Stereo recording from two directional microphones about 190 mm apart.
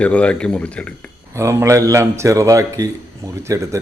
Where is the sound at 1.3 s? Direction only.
15° right (ahead or behind).